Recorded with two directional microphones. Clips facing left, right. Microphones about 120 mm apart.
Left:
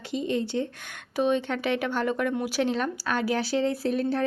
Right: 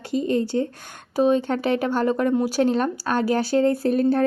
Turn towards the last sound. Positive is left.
turn(degrees=-45)  # may be behind; listen again after turning